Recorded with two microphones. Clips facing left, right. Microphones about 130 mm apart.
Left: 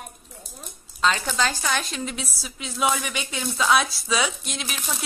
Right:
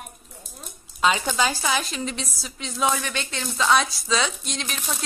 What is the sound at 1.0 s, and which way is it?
A woman's voice, 10° right (ahead or behind).